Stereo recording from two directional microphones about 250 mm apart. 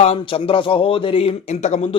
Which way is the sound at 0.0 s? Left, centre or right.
Left.